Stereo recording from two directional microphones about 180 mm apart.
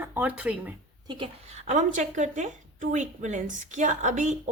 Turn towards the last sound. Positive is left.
turn(degrees=-45)  # may be behind; listen again after turning